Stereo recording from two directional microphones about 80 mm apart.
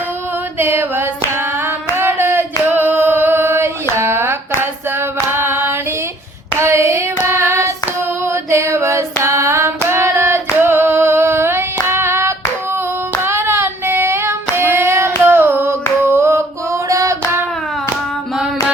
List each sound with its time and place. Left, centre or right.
0.6 s female singing: right
2.0 s singing: right
5.3 s female singing: right
6.6 s hands: right
13.2 s child singing: right
16.9 s hands: right